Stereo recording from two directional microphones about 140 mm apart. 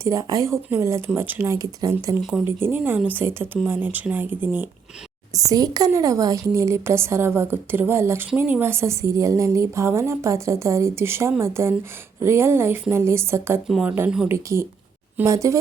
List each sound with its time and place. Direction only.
0.0 s a woman's voice: 20° right (ahead or behind)
2.4 s speech: 15° right (ahead or behind)
5.5 s a woman's voice: 25° right (ahead or behind)
13.7 s speech: centre (ahead or behind)
13.9 s a woman's voice: 15° right (ahead or behind)